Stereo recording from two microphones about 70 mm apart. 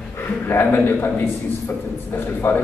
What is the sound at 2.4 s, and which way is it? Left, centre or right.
Speech, left.